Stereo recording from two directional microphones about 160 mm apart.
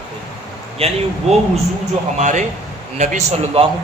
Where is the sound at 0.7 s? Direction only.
40° right (ahead or behind).